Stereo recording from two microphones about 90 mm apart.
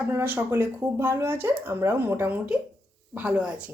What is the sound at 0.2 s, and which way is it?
Speech, 25° right (ahead or behind).